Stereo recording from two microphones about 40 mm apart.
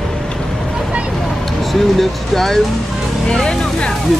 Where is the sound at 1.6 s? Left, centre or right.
Centre.